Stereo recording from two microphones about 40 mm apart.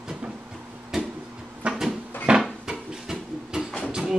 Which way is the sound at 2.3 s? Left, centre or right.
Right.